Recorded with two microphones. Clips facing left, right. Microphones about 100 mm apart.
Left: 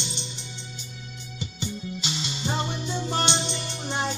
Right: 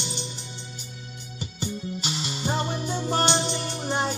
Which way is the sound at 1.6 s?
45° right (ahead or behind).